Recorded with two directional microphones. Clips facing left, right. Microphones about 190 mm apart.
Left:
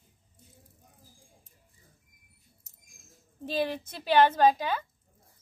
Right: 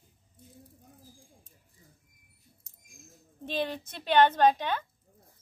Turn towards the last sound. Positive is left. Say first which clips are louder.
# left 1 dB
turn(degrees=5)  # may be behind; listen again after turning